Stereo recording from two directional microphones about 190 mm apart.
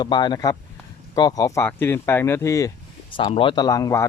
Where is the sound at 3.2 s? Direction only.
25° left (ahead or behind).